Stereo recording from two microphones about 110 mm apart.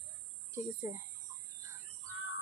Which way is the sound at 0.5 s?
25° right (ahead or behind).